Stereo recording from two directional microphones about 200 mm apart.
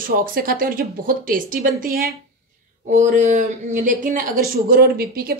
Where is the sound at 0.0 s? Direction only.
45° right (ahead or behind).